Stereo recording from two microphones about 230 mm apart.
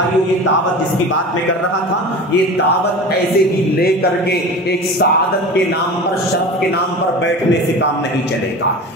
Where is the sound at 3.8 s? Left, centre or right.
Left.